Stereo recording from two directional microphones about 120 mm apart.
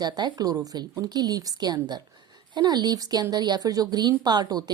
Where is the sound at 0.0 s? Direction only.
35° right (ahead or behind).